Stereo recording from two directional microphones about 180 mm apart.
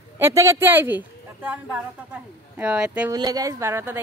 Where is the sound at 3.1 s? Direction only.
20° right (ahead or behind).